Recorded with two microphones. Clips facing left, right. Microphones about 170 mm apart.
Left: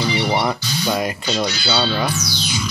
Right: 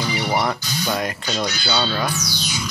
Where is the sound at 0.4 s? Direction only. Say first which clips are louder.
Left 2 dB; 5° left (ahead or behind).